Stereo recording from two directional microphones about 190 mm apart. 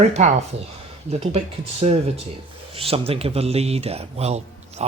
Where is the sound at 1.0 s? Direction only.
30° right (ahead or behind).